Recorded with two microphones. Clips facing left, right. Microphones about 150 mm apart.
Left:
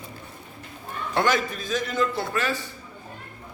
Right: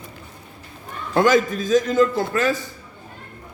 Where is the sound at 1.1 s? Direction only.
45° right (ahead or behind).